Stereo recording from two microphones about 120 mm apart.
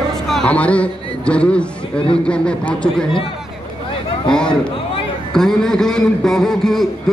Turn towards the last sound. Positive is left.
turn(degrees=5)  # may be behind; listen again after turning